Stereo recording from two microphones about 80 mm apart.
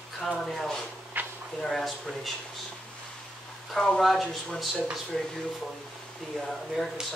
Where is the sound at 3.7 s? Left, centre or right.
Centre.